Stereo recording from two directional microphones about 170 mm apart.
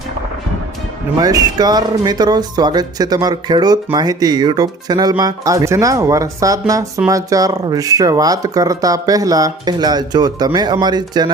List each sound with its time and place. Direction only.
1.2 s speech: 20° right (ahead or behind)